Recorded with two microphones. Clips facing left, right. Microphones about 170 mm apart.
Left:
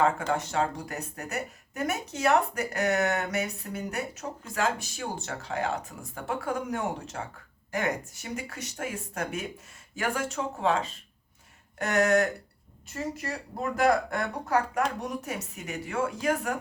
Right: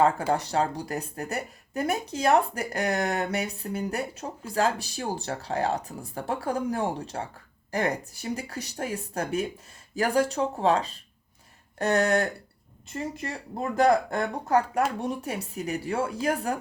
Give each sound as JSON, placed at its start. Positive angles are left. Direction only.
{"t": 0.3, "sound": "speech", "side_deg": -35}